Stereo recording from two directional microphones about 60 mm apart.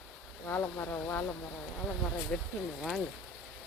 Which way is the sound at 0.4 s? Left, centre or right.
Left.